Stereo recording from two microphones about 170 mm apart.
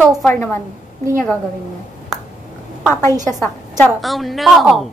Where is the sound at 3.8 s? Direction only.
Centre (ahead or behind).